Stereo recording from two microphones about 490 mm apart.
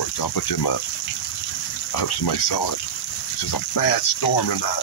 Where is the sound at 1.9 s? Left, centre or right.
Left.